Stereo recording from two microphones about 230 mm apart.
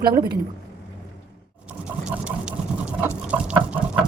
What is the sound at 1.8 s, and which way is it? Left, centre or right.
Fill, centre.